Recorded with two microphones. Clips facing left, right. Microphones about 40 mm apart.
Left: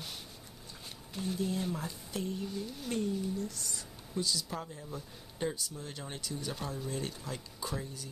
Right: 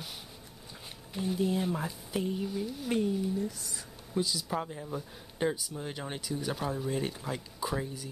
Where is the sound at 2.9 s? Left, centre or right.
Centre.